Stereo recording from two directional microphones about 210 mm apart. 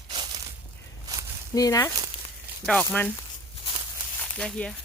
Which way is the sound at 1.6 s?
15° left (ahead or behind).